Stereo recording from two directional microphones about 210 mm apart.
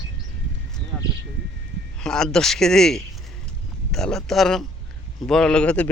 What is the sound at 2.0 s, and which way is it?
Speech, 5° left (ahead or behind).